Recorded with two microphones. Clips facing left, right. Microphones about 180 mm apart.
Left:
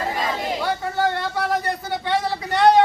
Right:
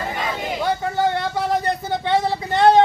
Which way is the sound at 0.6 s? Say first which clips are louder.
Right 4 dB; 15° right (ahead or behind).